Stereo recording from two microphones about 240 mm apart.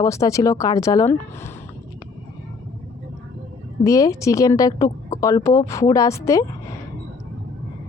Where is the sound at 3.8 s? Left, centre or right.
Centre.